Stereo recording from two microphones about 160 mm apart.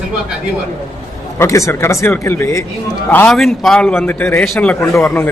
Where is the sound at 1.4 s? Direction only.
20° left (ahead or behind); by 5.1 s centre (ahead or behind).